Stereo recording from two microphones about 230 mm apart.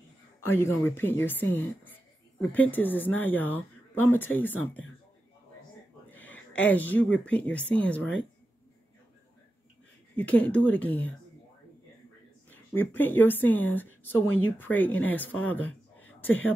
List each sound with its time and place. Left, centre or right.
0.4 s speech: centre
6.0 s a sound: centre
6.7 s speech: centre
10.1 s speech: centre
12.4 s speech: centre
15.4 s a sound: centre